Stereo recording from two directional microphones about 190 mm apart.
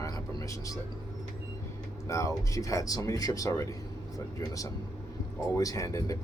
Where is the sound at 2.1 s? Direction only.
15° left (ahead or behind).